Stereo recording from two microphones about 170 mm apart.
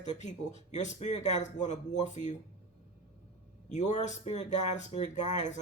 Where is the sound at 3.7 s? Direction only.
45° left (ahead or behind).